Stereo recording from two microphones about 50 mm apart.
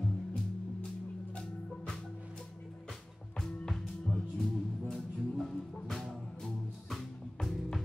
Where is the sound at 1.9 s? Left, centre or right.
Centre.